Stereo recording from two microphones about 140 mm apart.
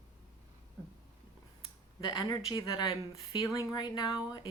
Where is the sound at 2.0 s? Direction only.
30° left (ahead or behind).